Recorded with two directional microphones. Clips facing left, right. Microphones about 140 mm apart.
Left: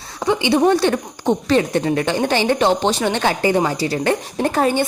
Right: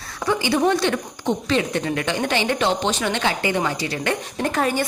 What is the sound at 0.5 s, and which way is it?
A woman's voice, 35° left (ahead or behind).